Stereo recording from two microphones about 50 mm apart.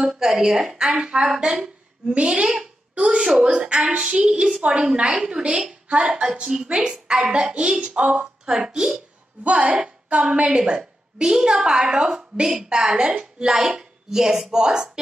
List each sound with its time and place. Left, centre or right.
0.0 s a woman's voice: centre
2.9 s a sound: right
3.2 s a woman's voice: centre
10.0 s a woman's voice: right